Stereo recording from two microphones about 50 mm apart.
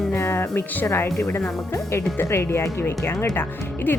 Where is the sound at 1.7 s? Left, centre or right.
Left.